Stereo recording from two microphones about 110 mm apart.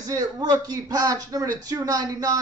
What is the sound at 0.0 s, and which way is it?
Speech, 35° right (ahead or behind).